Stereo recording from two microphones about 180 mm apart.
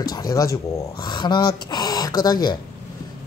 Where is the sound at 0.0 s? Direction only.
20° left (ahead or behind).